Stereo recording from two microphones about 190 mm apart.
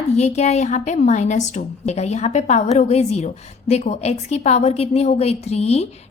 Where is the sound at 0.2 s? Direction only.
35° left (ahead or behind).